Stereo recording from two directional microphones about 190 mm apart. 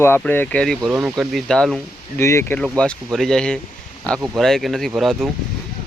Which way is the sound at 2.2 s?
15° left (ahead or behind).